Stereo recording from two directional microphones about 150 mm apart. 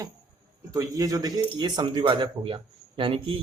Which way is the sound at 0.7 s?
25° right (ahead or behind).